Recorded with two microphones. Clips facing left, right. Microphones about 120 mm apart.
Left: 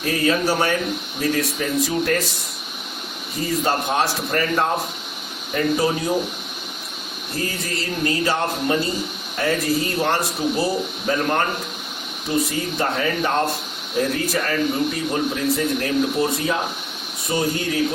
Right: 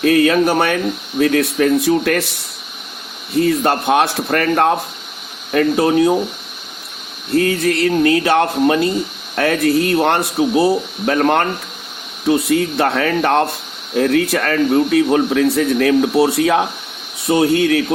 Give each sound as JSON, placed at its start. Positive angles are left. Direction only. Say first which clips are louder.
{"t": 0.0, "sound": "speech", "louder": "right 8 dB", "side_deg": -65}
{"t": 3.4, "sound": "speech", "louder": "right 5 dB", "side_deg": -65}
{"t": 7.3, "sound": "speech", "louder": "right 12 dB", "side_deg": -65}
{"t": 12.5, "sound": "speech", "louder": "right 8 dB", "side_deg": -65}
{"t": 17.2, "sound": "speech", "louder": "right 9 dB", "side_deg": -70}